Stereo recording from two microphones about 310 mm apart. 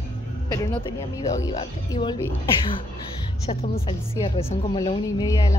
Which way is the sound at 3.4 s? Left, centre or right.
Centre.